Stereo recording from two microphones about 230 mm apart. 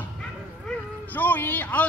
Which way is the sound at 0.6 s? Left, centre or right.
Centre.